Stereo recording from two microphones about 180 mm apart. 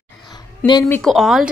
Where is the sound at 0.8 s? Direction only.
5° left (ahead or behind).